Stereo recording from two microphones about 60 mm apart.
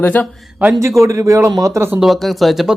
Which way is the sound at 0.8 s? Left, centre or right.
Right.